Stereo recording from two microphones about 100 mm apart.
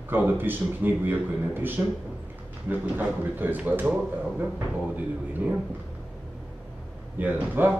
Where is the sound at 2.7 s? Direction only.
20° right (ahead or behind).